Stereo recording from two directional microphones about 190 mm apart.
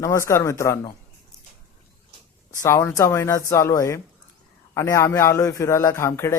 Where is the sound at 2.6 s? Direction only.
15° left (ahead or behind).